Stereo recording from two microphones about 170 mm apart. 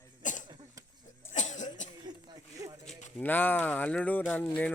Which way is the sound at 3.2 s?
10° left (ahead or behind).